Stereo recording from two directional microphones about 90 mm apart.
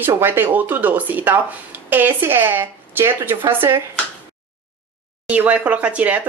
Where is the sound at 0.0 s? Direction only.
25° right (ahead or behind).